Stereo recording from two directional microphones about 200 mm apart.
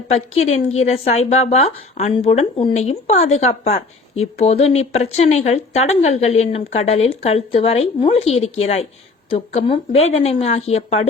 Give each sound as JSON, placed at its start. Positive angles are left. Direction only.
{"t": 0.4, "sound": "a woman's voice", "side_deg": 35}